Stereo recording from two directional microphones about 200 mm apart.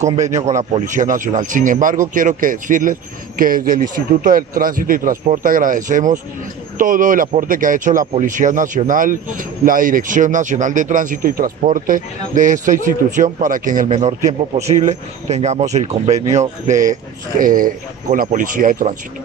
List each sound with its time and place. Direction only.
0.2 s a man's voice: 35° right (ahead or behind)